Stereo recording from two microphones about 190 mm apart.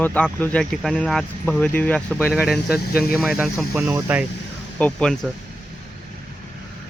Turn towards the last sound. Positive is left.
turn(degrees=5)  # may be behind; listen again after turning